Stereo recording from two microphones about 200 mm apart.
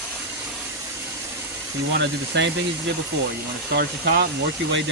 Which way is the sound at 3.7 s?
55° right (ahead or behind).